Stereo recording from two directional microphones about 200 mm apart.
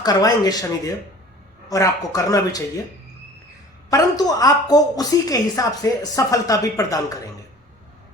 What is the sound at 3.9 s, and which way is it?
A woman's voice, 20° left (ahead or behind).